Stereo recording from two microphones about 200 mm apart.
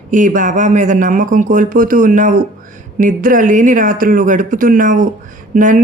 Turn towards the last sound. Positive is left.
turn(degrees=-40)  # may be behind; listen again after turning